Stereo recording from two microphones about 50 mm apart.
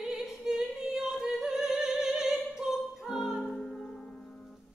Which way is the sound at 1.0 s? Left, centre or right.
Centre.